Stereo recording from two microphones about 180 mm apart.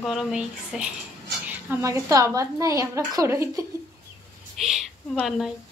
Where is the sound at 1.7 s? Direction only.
15° right (ahead or behind).